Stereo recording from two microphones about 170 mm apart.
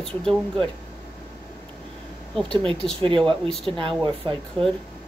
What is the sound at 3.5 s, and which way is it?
Speech, centre (ahead or behind).